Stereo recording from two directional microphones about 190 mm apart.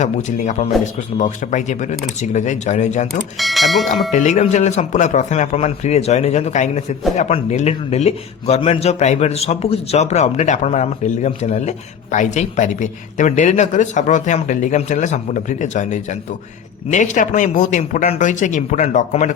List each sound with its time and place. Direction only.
0.0 s a man's voice: 40° left (ahead or behind)
3.3 s speech: centre (ahead or behind)
4.1 s a man's voice: 40° left (ahead or behind)